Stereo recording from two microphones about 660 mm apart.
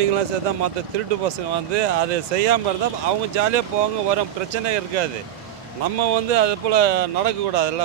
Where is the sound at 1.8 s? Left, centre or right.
Right.